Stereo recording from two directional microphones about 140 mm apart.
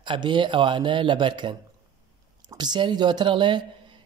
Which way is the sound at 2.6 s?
35° right (ahead or behind).